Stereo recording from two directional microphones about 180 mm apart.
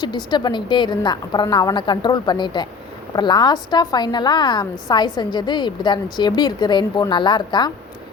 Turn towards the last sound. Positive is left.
turn(degrees=25)  # may be behind; listen again after turning